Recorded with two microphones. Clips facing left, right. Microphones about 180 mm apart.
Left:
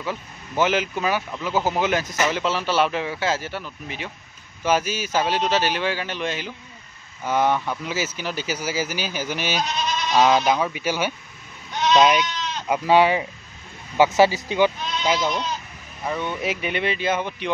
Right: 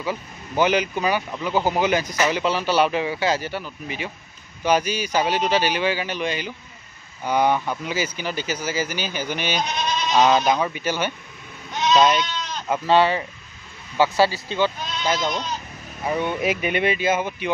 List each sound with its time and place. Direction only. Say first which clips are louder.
0.0 s speech: right 2 dB; centre (ahead or behind)
16.1 s speech: right 3 dB; 15° right (ahead or behind)